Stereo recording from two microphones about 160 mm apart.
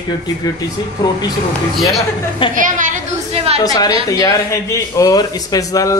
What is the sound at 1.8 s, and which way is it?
Speech, centre (ahead or behind).